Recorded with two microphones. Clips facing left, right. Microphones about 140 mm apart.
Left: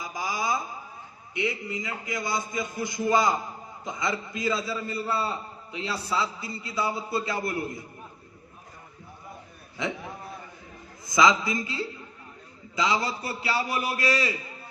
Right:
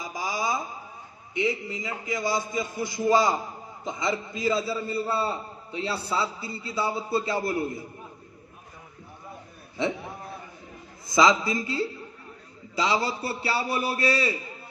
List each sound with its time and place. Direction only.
0.0 s a sound: 25° right (ahead or behind)
1.4 s a man's voice: 25° right (ahead or behind)
11.0 s a man's voice: 30° right (ahead or behind)